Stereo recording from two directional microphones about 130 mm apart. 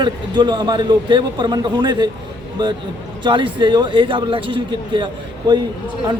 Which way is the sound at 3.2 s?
40° right (ahead or behind).